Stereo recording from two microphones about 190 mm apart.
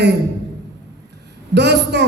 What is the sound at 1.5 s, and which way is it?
Speech, 65° right (ahead or behind).